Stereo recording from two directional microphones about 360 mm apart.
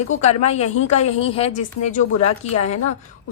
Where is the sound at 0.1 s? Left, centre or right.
Centre.